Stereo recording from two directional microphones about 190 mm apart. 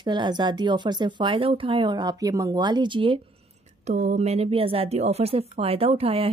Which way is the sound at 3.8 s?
40° right (ahead or behind).